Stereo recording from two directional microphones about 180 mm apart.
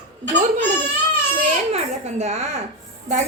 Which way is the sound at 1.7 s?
40° right (ahead or behind).